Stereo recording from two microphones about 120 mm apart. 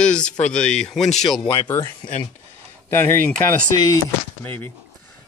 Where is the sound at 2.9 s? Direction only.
15° left (ahead or behind).